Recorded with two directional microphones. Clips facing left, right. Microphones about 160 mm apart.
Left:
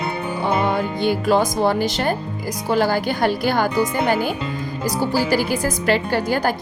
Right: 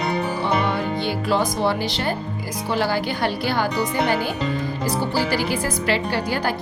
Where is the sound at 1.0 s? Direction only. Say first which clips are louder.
Left 6 dB; 45° left (ahead or behind).